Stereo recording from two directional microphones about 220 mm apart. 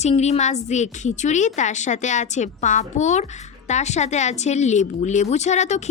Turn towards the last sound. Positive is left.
turn(degrees=30)  # may be behind; listen again after turning